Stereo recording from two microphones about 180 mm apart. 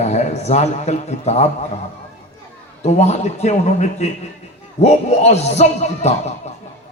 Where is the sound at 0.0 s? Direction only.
40° left (ahead or behind).